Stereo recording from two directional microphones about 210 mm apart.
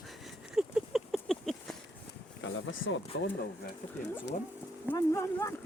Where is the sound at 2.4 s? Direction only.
65° left (ahead or behind).